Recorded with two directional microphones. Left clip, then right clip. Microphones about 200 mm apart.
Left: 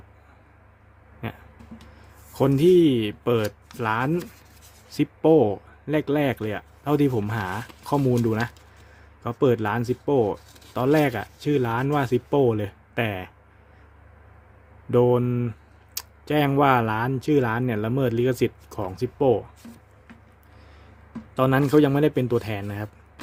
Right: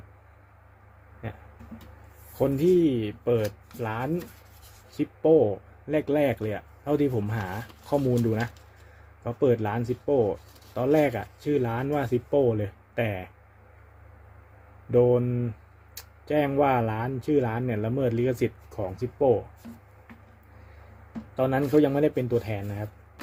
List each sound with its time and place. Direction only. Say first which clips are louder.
1.2 s speech: left 5 dB; 35° left (ahead or behind)
2.4 s speech: left 4 dB; 35° left (ahead or behind)
14.8 s speech: left 1 dB; 30° left (ahead or behind)
21.3 s speech: left 3 dB; 30° left (ahead or behind)